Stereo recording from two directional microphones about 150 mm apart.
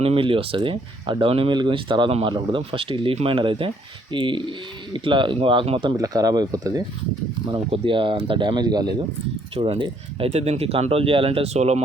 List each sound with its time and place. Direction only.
0.0 s speech: 40° right (ahead or behind)
6.0 s speech: 25° right (ahead or behind)
7.4 s speech: 35° right (ahead or behind)